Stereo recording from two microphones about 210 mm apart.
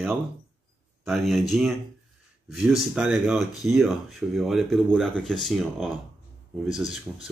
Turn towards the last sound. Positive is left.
turn(degrees=-5)  # may be behind; listen again after turning